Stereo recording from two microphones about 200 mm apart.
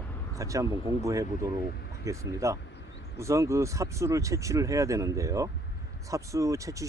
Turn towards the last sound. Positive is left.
turn(degrees=-15)  # may be behind; listen again after turning